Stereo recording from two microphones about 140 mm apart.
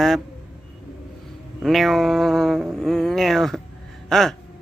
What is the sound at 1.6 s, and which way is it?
A man's voice, centre (ahead or behind).